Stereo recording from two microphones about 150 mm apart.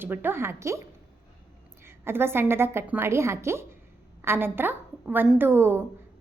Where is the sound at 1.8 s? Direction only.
15° right (ahead or behind).